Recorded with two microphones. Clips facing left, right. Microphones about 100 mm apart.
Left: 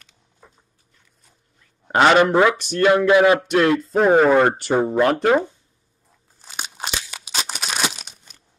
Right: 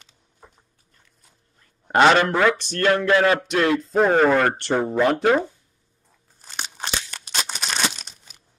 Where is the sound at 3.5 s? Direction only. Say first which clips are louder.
Left 2 dB; 5° left (ahead or behind).